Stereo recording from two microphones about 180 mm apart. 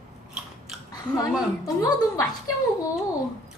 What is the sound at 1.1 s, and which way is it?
A woman's voice, 20° left (ahead or behind).